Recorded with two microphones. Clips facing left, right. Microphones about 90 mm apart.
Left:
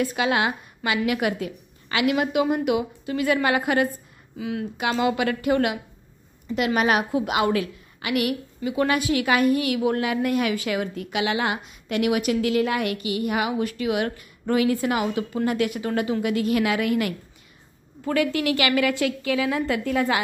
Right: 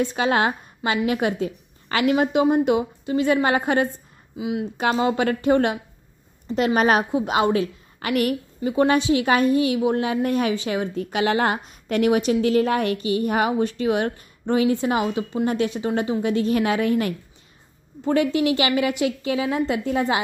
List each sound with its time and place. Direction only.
0.0 s a woman's voice: 30° right (ahead or behind)
4.4 s speech: 15° right (ahead or behind)
4.7 s a woman's voice: 35° right (ahead or behind)